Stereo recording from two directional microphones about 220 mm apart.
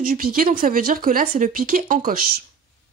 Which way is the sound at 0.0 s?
40° right (ahead or behind).